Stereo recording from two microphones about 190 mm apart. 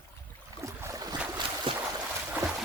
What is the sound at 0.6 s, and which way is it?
Boat, 15° right (ahead or behind).